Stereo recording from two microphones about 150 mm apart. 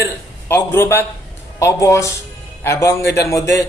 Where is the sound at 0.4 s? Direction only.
15° left (ahead or behind).